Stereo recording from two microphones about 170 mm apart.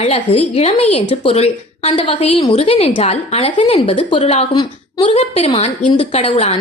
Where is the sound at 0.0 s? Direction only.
35° left (ahead or behind).